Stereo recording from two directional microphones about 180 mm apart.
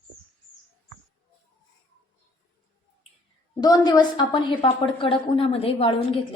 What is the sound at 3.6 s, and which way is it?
A woman's voice, 20° left (ahead or behind).